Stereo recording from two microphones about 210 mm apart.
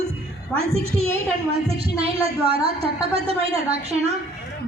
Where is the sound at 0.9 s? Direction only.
90° right.